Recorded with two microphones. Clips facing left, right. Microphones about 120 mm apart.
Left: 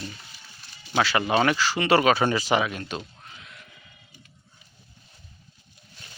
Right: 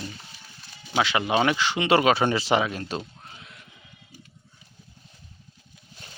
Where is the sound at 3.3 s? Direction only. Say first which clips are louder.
Even; 30° right (ahead or behind).